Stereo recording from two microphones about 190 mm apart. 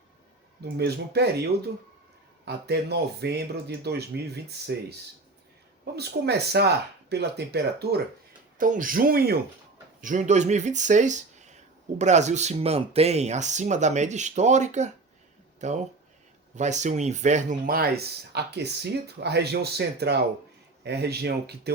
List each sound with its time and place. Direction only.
0.6 s speech: 60° right (ahead or behind)
8.5 s speech: 45° right (ahead or behind)
10.0 s speech: 40° right (ahead or behind); by 21.7 s 60° right (ahead or behind)